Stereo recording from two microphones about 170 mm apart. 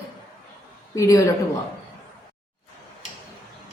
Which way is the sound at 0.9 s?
20° left (ahead or behind).